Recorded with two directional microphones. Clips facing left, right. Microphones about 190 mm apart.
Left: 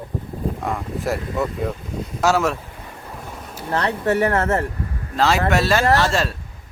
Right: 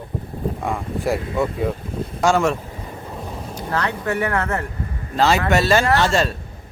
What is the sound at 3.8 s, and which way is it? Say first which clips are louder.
Speech: left 4 dB; 35° left (ahead or behind).